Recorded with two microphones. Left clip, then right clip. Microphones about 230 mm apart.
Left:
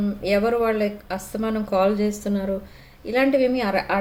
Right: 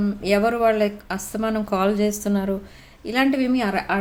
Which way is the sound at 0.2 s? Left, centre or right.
Right.